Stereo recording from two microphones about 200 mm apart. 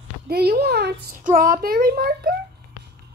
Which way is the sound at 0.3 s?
50° right (ahead or behind).